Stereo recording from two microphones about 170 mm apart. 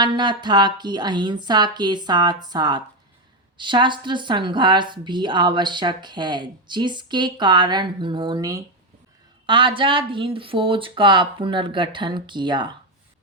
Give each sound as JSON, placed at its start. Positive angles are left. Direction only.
{"t": 0.0, "sound": "speech", "side_deg": -25}